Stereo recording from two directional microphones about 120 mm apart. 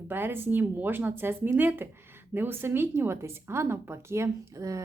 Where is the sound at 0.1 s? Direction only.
20° right (ahead or behind).